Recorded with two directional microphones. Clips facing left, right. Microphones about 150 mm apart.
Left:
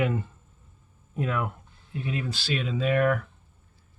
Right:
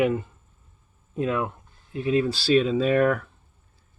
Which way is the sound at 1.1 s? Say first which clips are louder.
Right 4 dB; 25° right (ahead or behind).